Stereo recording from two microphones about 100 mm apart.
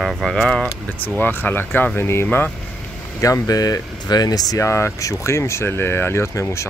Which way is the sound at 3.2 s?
35° left (ahead or behind).